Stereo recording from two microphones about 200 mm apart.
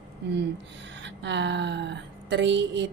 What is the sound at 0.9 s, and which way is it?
Speech, 65° right (ahead or behind).